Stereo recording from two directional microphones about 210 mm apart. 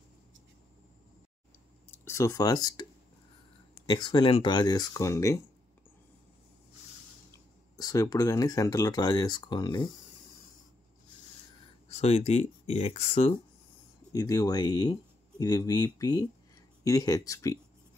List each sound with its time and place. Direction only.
1.9 s speech: 15° left (ahead or behind)
3.9 s speech: 20° left (ahead or behind)
7.7 s speech: 15° left (ahead or behind)
11.9 s speech: 30° left (ahead or behind)